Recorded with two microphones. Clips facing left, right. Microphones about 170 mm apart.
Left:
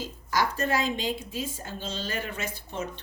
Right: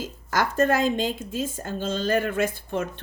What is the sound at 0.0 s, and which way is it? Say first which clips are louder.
Speech: right 2 dB; 50° right (ahead or behind).